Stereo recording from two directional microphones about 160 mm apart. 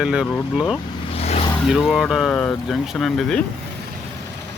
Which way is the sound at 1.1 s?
40° left (ahead or behind).